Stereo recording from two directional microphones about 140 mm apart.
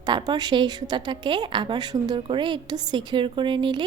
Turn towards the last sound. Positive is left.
turn(degrees=-35)  # may be behind; listen again after turning